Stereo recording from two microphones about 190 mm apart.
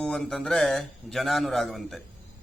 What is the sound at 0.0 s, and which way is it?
Mantra, centre (ahead or behind).